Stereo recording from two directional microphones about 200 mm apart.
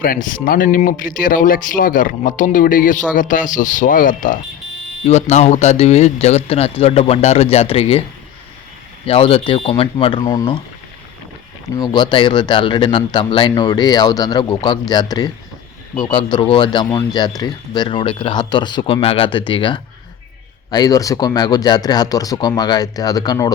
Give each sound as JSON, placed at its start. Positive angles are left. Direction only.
{"t": 0.0, "sound": "speech", "side_deg": 45}
{"t": 9.0, "sound": "speech", "side_deg": 30}
{"t": 11.8, "sound": "speech", "side_deg": 20}